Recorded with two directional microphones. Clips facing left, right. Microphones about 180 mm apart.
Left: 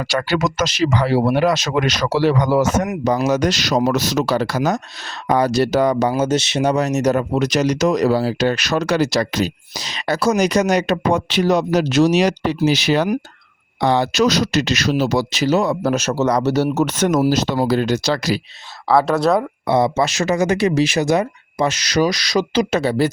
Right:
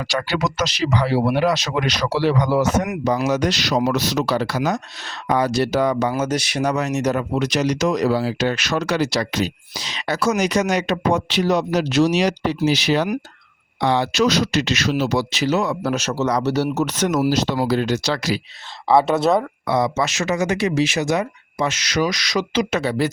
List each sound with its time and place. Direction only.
0.1 s speech: 45° left (ahead or behind)
18.9 s speech: centre (ahead or behind)
19.6 s speech: 25° left (ahead or behind)